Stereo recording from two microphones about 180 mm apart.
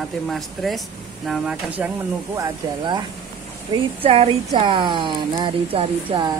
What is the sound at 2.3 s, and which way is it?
Speech, 20° right (ahead or behind).